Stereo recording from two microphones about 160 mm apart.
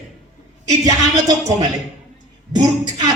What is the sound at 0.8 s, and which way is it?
Speech, 25° right (ahead or behind).